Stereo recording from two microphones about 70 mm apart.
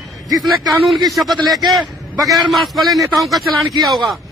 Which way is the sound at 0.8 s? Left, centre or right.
Centre.